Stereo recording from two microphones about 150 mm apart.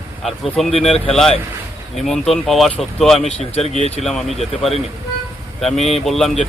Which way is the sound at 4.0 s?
Centre (ahead or behind).